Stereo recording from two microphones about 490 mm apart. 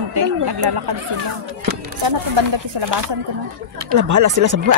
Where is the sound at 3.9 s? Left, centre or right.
Right.